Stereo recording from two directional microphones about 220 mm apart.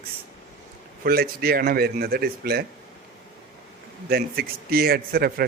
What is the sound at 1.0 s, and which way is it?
A man's voice, 45° right (ahead or behind).